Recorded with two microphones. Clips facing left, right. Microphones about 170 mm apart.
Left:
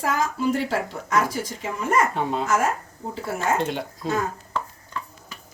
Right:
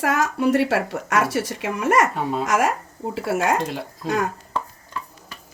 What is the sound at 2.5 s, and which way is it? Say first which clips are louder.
A woman's voice: right 2 dB; 85° right.